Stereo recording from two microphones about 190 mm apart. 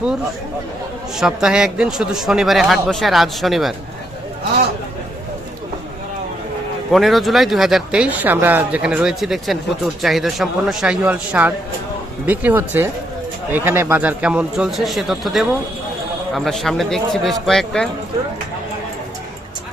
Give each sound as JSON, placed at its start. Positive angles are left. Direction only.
{"t": 1.1, "sound": "a man's voice", "side_deg": -5}
{"t": 6.9, "sound": "a man's voice", "side_deg": 0}